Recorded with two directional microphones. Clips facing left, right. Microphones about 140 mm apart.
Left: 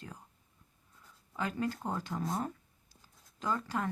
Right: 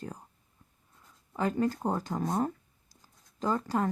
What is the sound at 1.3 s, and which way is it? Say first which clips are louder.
Speech: right 6 dB; 40° right (ahead or behind).